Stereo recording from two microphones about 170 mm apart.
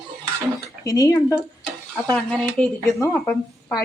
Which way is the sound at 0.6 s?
20° left (ahead or behind).